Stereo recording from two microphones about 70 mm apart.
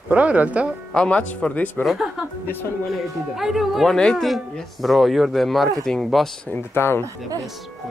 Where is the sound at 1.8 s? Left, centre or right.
Centre.